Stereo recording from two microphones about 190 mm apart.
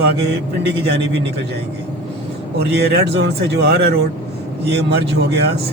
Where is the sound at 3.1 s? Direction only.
60° right (ahead or behind).